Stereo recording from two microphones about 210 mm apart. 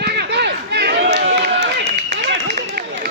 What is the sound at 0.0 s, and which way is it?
Run, 50° right (ahead or behind).